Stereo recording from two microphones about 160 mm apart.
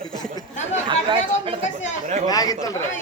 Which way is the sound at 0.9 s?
30° right (ahead or behind).